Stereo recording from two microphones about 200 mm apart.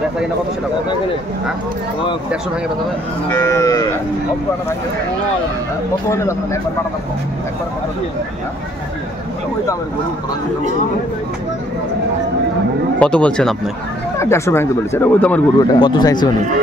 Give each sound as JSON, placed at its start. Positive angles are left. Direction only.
{"t": 3.3, "sound": "speech", "side_deg": 15}
{"t": 6.0, "sound": "speech", "side_deg": 15}
{"t": 13.0, "sound": "speech", "side_deg": 5}
{"t": 15.7, "sound": "speech", "side_deg": 20}